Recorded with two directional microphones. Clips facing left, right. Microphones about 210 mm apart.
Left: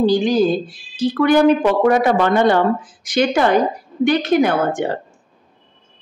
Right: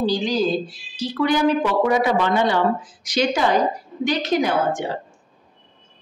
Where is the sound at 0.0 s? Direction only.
50° left (ahead or behind).